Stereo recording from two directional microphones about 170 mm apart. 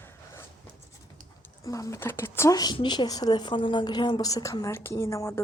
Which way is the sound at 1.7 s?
20° left (ahead or behind).